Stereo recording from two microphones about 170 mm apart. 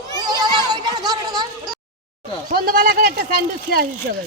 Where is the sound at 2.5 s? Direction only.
55° right (ahead or behind).